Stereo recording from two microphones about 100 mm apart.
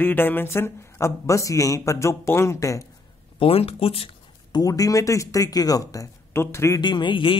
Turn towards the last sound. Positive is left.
turn(degrees=55)  # may be behind; listen again after turning